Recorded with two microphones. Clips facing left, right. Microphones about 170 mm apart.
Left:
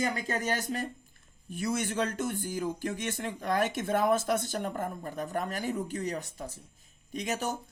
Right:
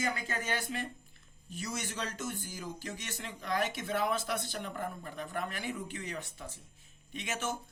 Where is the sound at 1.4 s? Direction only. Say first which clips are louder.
Left 8 dB; 55° left (ahead or behind).